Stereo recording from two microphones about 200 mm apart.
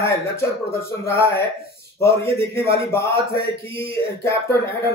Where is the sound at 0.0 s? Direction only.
15° left (ahead or behind).